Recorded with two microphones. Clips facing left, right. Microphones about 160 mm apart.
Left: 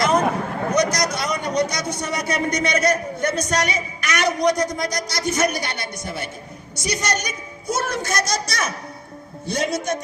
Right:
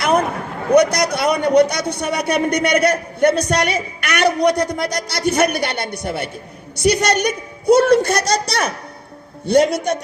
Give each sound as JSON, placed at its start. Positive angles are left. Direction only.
{"t": 0.7, "sound": "a man's voice", "side_deg": -60}